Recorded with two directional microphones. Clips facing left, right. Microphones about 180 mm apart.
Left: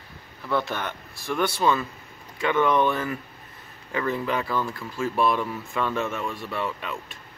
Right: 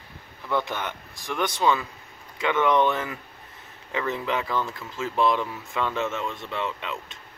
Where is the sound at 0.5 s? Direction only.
15° right (ahead or behind).